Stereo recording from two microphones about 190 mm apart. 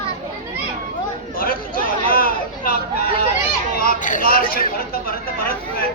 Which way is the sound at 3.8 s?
45° left (ahead or behind).